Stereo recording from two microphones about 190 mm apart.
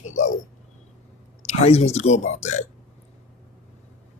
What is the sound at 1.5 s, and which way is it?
Speech, 35° left (ahead or behind).